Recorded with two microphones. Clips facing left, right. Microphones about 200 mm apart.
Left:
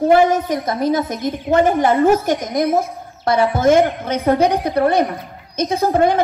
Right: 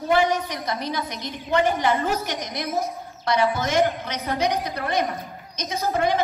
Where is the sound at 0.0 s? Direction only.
50° left (ahead or behind).